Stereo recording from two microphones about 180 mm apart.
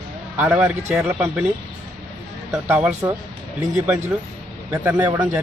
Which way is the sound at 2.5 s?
10° right (ahead or behind).